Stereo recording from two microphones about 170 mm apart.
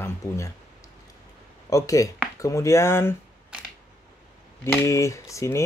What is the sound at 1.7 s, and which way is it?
Speech, 20° left (ahead or behind).